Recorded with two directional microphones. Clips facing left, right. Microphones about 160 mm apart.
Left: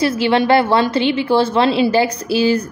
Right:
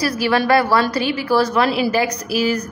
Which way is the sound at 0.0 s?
25° left (ahead or behind).